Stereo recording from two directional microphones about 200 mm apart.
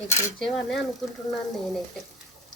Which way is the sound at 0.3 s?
Centre (ahead or behind).